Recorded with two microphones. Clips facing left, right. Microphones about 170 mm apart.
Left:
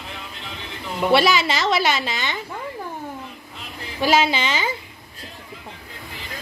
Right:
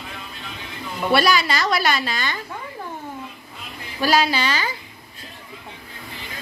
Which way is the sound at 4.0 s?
20° left (ahead or behind).